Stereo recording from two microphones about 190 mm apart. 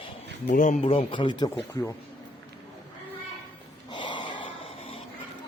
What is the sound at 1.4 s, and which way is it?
Speech, 15° left (ahead or behind).